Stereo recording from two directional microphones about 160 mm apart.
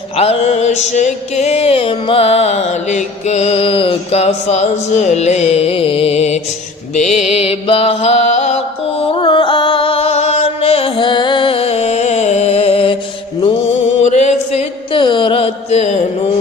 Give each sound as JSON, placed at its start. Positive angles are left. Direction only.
{"t": 0.2, "sound": "music", "side_deg": 40}
{"t": 6.9, "sound": "mantra", "side_deg": 45}
{"t": 14.0, "sound": "music", "side_deg": 45}
{"t": 14.9, "sound": "mantra", "side_deg": 30}